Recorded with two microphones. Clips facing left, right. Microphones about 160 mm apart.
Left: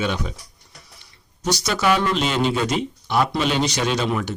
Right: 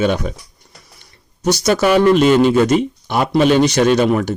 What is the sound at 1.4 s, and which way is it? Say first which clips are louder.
Speech: right 6 dB; 50° right (ahead or behind).